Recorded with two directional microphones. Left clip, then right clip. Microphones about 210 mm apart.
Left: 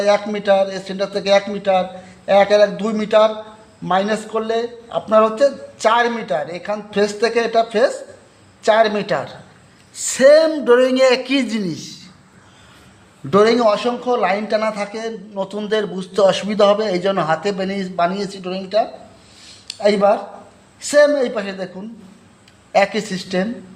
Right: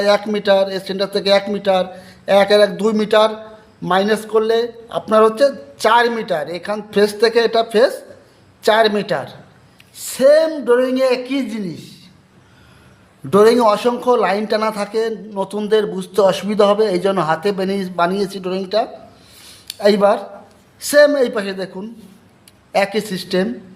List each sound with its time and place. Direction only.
0.0 s a man's voice: 15° right (ahead or behind); by 11.9 s 10° left (ahead or behind)
13.3 s a man's voice: 15° right (ahead or behind)
19.5 s a sound: 20° right (ahead or behind)
20.8 s a man's voice: 15° right (ahead or behind)